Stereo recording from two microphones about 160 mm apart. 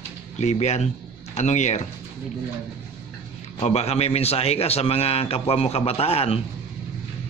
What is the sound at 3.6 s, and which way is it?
A man's voice, 40° left (ahead or behind).